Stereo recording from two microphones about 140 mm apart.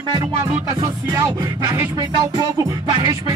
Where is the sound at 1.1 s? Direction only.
25° right (ahead or behind).